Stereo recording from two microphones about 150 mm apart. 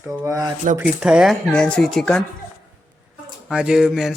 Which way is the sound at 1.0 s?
5° right (ahead or behind).